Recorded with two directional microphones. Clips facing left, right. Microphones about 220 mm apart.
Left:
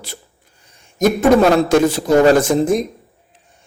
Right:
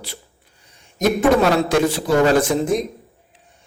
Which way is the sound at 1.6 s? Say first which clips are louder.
Left 4 dB; 45° left (ahead or behind).